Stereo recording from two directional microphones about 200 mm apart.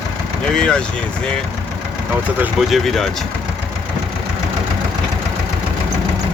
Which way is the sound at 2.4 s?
Centre (ahead or behind).